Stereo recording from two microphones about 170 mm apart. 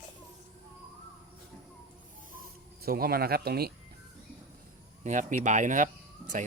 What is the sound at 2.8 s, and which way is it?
Speech, 65° right (ahead or behind).